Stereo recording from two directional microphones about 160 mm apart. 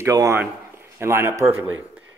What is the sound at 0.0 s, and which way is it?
Speech, 20° right (ahead or behind).